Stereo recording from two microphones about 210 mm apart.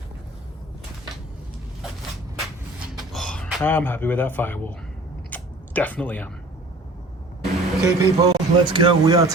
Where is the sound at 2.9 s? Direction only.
5° left (ahead or behind).